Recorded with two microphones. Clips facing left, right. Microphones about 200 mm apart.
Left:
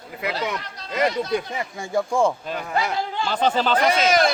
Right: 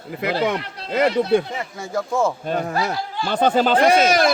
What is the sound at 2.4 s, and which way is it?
Speech, 45° right (ahead or behind).